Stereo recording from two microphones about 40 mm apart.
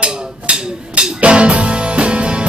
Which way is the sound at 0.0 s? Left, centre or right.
Right.